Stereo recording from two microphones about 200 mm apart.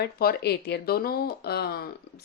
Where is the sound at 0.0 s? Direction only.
50° left (ahead or behind).